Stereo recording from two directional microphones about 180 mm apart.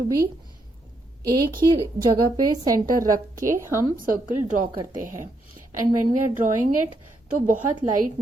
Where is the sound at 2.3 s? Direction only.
20° right (ahead or behind).